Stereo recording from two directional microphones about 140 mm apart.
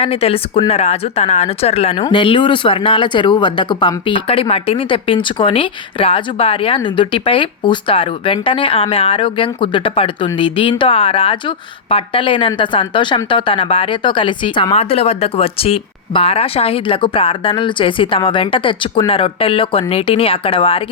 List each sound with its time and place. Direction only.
0.0 s speech: 45° left (ahead or behind)
2.0 s speech: 35° left (ahead or behind)